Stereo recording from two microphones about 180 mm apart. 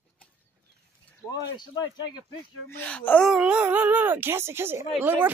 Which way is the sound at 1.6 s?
25° left (ahead or behind).